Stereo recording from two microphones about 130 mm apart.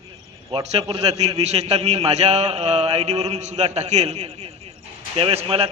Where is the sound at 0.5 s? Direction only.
50° right (ahead or behind).